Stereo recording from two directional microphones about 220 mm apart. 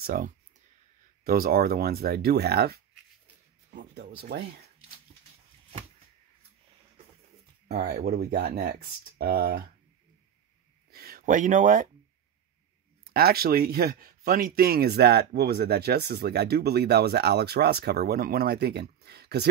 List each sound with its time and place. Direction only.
0.0 s speech: 40° right (ahead or behind)
3.9 s speech: 45° right (ahead or behind)
7.6 s speech: 45° right (ahead or behind)
10.9 s speech: 45° right (ahead or behind)
13.0 s speech: 45° right (ahead or behind)